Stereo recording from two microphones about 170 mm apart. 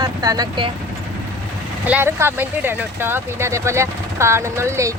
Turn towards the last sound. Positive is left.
turn(degrees=-15)  # may be behind; listen again after turning